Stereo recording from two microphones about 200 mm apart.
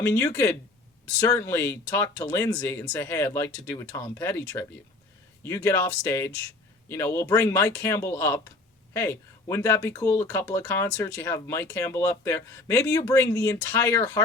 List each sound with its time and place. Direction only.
0.0 s speech: 15° left (ahead or behind)